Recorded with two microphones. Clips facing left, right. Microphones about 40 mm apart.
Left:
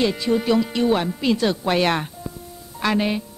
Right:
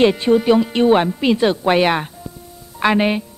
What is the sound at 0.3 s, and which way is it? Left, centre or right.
Speech, centre.